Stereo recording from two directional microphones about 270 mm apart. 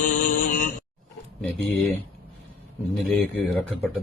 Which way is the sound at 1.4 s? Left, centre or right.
Centre.